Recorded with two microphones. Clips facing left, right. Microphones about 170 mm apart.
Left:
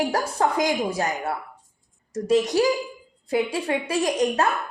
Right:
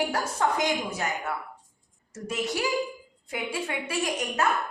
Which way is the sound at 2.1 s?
40° left (ahead or behind).